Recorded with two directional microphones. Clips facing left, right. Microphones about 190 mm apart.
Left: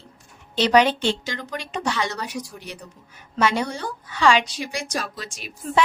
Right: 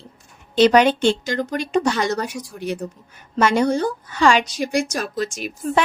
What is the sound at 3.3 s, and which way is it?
A woman's voice, 45° right (ahead or behind).